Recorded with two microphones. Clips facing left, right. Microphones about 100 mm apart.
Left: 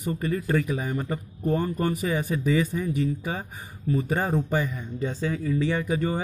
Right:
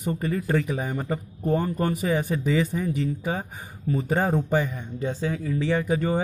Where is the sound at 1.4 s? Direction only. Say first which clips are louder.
Right 1 dB; 15° right (ahead or behind).